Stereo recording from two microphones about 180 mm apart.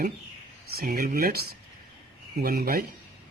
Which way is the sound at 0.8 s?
55° right (ahead or behind).